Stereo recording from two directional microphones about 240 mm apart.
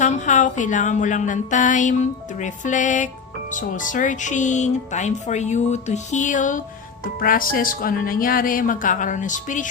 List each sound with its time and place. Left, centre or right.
0.0 s speech: left